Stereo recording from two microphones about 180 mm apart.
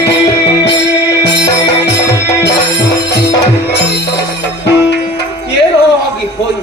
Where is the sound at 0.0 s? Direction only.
70° left (ahead or behind).